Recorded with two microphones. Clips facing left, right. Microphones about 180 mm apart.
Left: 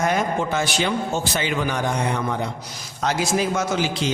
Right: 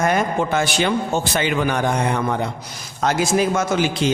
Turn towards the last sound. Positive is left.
turn(degrees=-55)  # may be behind; listen again after turning